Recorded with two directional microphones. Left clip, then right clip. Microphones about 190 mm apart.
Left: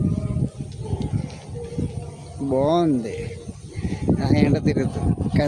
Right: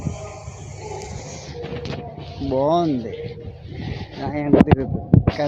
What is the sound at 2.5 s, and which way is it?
Speech, 25° left (ahead or behind).